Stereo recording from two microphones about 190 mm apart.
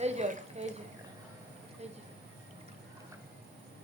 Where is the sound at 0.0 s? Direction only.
35° right (ahead or behind).